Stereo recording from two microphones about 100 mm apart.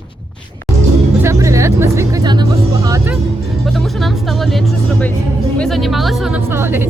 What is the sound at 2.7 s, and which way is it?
Speech, 35° right (ahead or behind).